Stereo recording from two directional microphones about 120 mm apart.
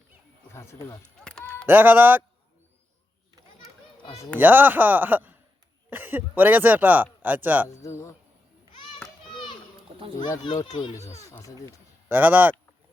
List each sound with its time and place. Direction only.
0.5 s speech: 20° left (ahead or behind)
1.2 s a sound: 5° left (ahead or behind)
1.6 s speech: 15° right (ahead or behind)
4.4 s speech: 15° right (ahead or behind)
7.8 s speech: 25° left (ahead or behind)
9.3 s children playing: 40° left (ahead or behind)
10.2 s speech: 35° left (ahead or behind)
10.7 s speech: 50° left (ahead or behind)
11.2 s speech: 25° left (ahead or behind)
12.0 s speech: 15° right (ahead or behind)